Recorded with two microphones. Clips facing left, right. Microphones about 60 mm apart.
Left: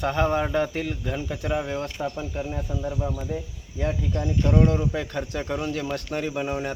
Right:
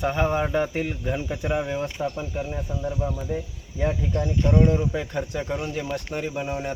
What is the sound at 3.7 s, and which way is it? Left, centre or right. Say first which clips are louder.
Speech: right 2 dB; centre.